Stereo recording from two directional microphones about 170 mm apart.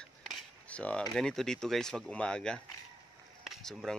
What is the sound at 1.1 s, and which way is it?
Speech, 5° left (ahead or behind).